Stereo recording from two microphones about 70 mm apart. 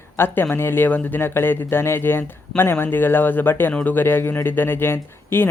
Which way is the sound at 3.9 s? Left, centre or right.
Left.